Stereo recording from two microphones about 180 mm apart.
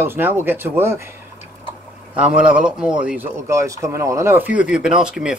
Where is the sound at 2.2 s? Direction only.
5° right (ahead or behind).